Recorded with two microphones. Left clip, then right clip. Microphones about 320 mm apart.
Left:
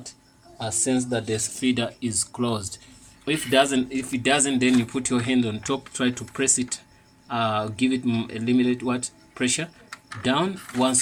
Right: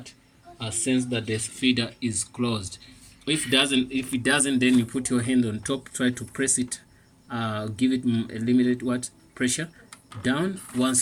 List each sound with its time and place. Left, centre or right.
0.6 s speech: left
1.5 s speech: centre